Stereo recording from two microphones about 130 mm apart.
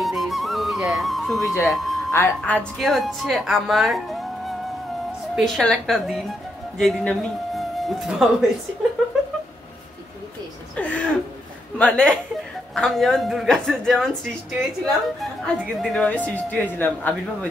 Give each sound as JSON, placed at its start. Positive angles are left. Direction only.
{"t": 0.0, "sound": "music", "side_deg": 0}
{"t": 1.6, "sound": "speech", "side_deg": 0}
{"t": 2.1, "sound": "a woman's voice", "side_deg": 15}
{"t": 2.8, "sound": "a woman's voice", "side_deg": 0}
{"t": 10.8, "sound": "a sound", "side_deg": 10}
{"t": 11.8, "sound": "a woman's voice", "side_deg": 5}